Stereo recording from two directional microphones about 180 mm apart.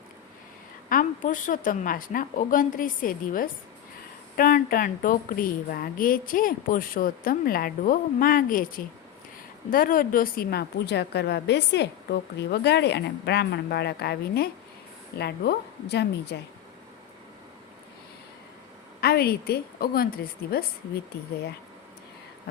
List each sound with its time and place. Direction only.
0.9 s a woman's voice: 50° left (ahead or behind)
9.6 s a woman's voice: 50° left (ahead or behind); by 16.4 s 70° left (ahead or behind)
18.9 s a woman's voice: 60° left (ahead or behind)